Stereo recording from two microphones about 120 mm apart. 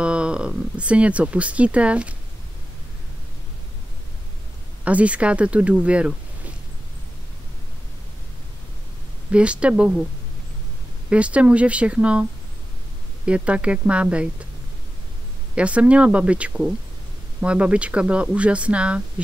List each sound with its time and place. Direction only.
0.0 s speech: 10° right (ahead or behind)
4.8 s speech: 10° right (ahead or behind)
9.3 s speech: 10° right (ahead or behind)
11.1 s speech: 10° right (ahead or behind)
15.5 s speech: 10° right (ahead or behind)